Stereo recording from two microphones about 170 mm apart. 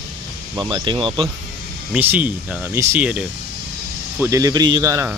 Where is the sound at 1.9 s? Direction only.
10° right (ahead or behind).